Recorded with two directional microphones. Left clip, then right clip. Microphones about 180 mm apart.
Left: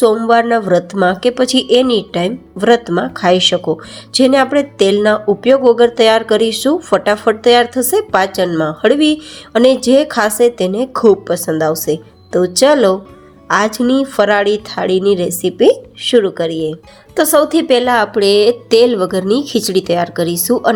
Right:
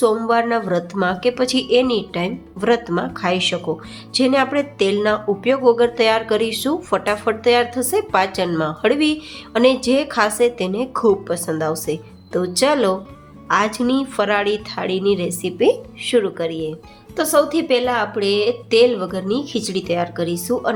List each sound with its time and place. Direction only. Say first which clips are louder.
0.0 s a woman's voice: left 6 dB; 25° left (ahead or behind)
17.2 s a woman's voice: left 5 dB; 45° left (ahead or behind)